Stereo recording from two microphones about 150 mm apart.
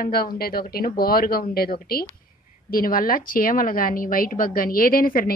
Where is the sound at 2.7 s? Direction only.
75° left (ahead or behind).